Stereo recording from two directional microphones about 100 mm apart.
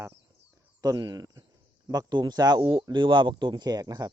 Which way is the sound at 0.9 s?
45° right (ahead or behind).